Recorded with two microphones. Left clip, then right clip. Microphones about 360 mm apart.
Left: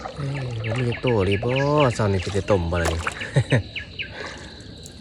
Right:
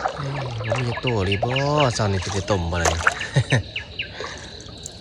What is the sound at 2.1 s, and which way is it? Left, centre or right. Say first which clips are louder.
Speech: left 1 dB; right.